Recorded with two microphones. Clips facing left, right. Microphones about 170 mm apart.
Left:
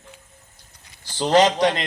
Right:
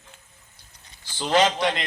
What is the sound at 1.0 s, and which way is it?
Speech, 40° left (ahead or behind).